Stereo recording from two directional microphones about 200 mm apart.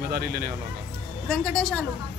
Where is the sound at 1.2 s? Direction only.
Centre (ahead or behind).